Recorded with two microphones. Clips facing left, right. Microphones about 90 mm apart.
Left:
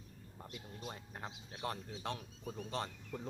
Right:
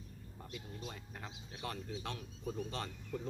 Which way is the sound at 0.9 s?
30° left (ahead or behind).